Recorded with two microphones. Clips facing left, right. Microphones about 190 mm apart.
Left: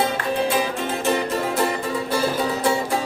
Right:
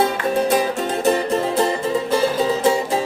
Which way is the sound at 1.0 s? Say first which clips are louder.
Right 4 dB; 35° right (ahead or behind).